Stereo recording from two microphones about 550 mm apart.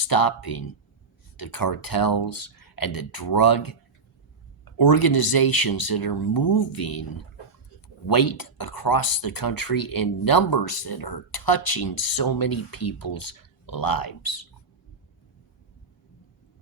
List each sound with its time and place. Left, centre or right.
0.0 s speech: left
8.0 s speech: left